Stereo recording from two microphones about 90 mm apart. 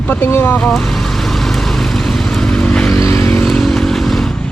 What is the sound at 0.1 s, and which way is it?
Speech, 25° left (ahead or behind).